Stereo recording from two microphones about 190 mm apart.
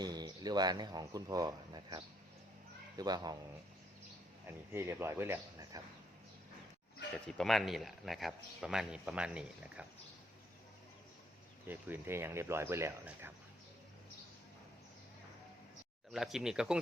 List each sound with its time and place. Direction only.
0.0 s a man's voice: 20° right (ahead or behind)
4.7 s speech: 10° right (ahead or behind)
7.3 s speech: centre (ahead or behind)
11.7 s speech: 10° right (ahead or behind)
16.1 s speech: centre (ahead or behind)